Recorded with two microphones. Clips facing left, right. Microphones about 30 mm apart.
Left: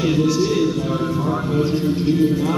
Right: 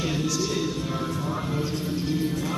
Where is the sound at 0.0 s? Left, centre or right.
Centre.